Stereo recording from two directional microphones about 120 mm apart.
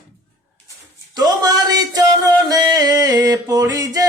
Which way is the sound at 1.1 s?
35° right (ahead or behind).